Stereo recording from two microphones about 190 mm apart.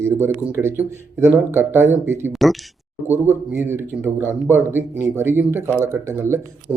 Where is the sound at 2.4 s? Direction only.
Centre (ahead or behind).